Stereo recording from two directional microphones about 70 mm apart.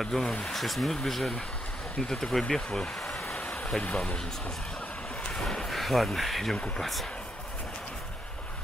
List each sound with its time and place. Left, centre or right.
0.0 s speech: centre
5.3 s speech: centre